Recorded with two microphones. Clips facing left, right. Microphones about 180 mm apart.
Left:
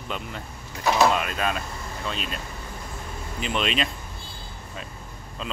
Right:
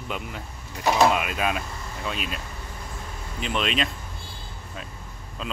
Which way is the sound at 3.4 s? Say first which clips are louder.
Even; centre (ahead or behind).